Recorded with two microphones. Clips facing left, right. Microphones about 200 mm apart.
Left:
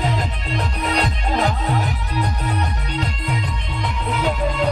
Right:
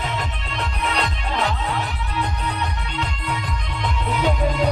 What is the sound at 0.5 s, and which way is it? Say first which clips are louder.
Music: left 3 dB; 35° left (ahead or behind).